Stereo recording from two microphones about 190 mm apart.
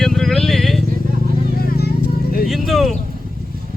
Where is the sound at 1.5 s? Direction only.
55° left (ahead or behind).